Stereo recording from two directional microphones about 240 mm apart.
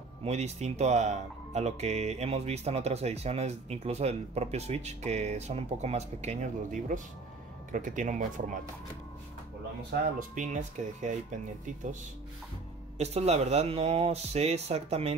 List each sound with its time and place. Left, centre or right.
0.2 s speech: right
9.8 s speech: right